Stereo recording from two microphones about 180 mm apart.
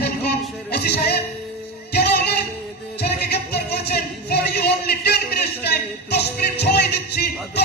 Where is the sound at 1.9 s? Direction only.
65° left (ahead or behind).